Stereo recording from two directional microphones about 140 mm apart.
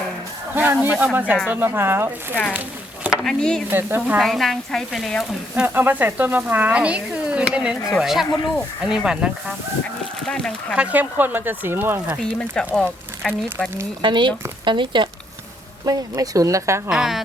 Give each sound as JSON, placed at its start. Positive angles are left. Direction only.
{"t": 0.5, "sound": "speech", "side_deg": -15}
{"t": 3.2, "sound": "speech", "side_deg": 5}
{"t": 3.7, "sound": "speech", "side_deg": -15}
{"t": 4.2, "sound": "speech", "side_deg": 0}
{"t": 5.6, "sound": "speech", "side_deg": -15}
{"t": 10.8, "sound": "speech", "side_deg": -10}
{"t": 12.2, "sound": "speech", "side_deg": 5}
{"t": 14.0, "sound": "speech", "side_deg": -35}
{"t": 16.9, "sound": "speech", "side_deg": -5}